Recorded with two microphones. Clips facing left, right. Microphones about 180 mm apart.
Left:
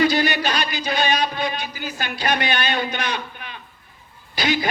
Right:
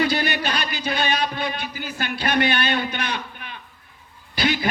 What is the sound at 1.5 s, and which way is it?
A man's voice, 55° right (ahead or behind).